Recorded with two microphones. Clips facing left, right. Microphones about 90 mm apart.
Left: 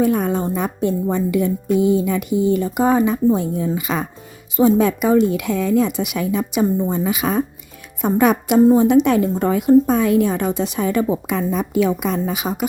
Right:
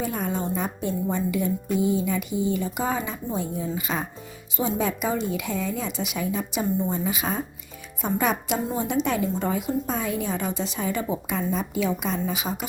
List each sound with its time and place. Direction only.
0.0 s a woman's voice: 60° left (ahead or behind); by 4.0 s 80° left
4.5 s a woman's voice: 60° left (ahead or behind)